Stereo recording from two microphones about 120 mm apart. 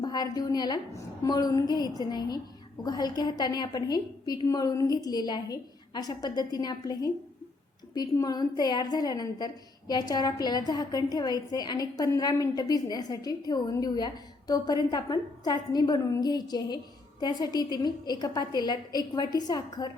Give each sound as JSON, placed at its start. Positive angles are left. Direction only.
{"t": 0.0, "sound": "a woman's voice", "side_deg": 35}